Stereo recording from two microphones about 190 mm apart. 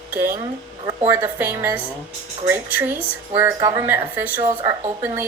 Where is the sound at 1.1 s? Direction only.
15° right (ahead or behind).